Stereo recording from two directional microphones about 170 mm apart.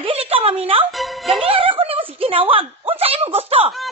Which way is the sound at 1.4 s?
30° right (ahead or behind).